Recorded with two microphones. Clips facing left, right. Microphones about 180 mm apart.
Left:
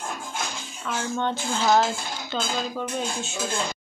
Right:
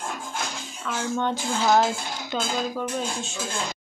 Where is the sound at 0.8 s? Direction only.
5° right (ahead or behind).